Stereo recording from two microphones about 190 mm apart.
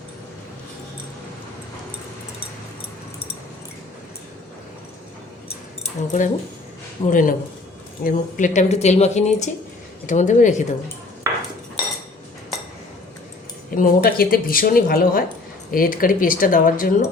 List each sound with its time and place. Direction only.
5.8 s speech: 40° left (ahead or behind)
11.3 s cutlery: 15° right (ahead or behind)
13.7 s speech: 50° left (ahead or behind)